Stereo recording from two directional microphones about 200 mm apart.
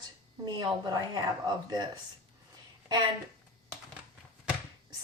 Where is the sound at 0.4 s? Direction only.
20° right (ahead or behind).